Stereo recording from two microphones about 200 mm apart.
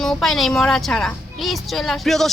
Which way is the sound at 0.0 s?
Centre (ahead or behind).